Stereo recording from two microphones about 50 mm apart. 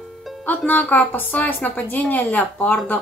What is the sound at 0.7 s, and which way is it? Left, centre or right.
Speech, left.